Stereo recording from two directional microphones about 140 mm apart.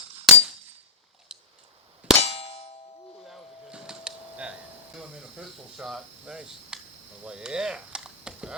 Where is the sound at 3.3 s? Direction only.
Centre (ahead or behind).